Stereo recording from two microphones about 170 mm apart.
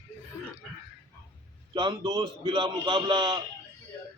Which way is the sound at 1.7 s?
25° right (ahead or behind).